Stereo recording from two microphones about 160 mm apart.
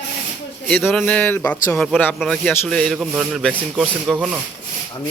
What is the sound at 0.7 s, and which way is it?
Speech, 10° left (ahead or behind).